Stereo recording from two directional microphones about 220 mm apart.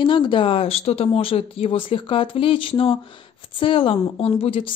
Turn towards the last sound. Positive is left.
turn(degrees=25)  # may be behind; listen again after turning